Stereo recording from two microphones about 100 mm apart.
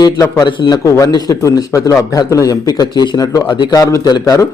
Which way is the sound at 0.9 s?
35° left (ahead or behind).